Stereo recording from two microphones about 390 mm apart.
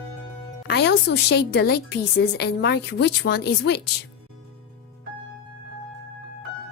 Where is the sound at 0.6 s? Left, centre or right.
Left.